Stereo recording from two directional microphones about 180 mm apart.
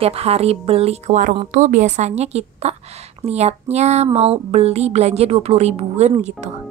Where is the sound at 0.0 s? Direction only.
35° right (ahead or behind).